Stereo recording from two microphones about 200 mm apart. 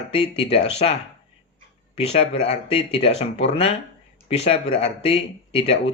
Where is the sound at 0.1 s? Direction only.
30° left (ahead or behind).